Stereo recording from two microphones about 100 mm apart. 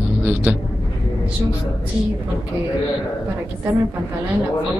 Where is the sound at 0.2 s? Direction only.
20° right (ahead or behind).